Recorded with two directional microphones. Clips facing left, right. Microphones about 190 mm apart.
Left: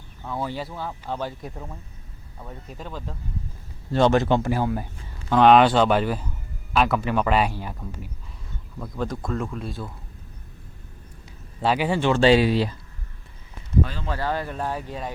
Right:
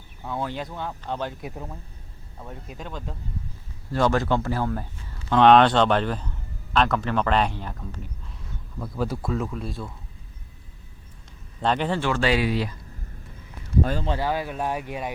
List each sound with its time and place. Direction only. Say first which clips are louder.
0.3 s speech: left 1 dB; 5° left (ahead or behind)
1.4 s speech: right 1 dB; 5° right (ahead or behind)
3.9 s a man's voice: left 3 dB; 25° left (ahead or behind); by 9.9 s centre (ahead or behind)
11.6 s a man's voice: left 1 dB; 5° left (ahead or behind)
11.9 s speech: left 6 dB; 25° left (ahead or behind)
14.2 s speech: right 1 dB; 10° right (ahead or behind)